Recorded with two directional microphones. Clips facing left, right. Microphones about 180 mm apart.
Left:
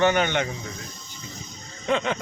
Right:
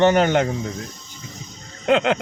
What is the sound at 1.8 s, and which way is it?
Speech, 80° right.